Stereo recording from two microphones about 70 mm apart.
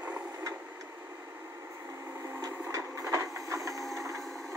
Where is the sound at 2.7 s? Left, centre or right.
Right.